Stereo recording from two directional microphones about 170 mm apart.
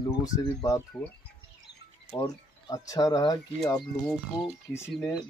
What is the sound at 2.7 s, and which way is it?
Speech, 20° left (ahead or behind).